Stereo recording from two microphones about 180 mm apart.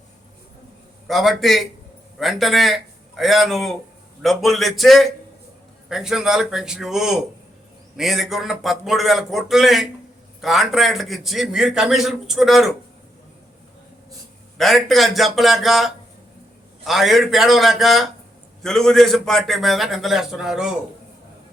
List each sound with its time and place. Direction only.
1.0 s a man's voice: centre (ahead or behind)
14.6 s a man's voice: centre (ahead or behind)